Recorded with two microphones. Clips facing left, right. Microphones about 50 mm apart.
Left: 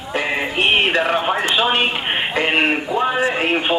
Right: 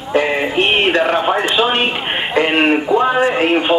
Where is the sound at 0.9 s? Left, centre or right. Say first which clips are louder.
Right 3 dB; centre.